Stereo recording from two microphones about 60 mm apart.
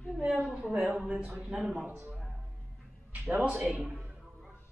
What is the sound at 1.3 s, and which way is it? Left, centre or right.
Speech, centre.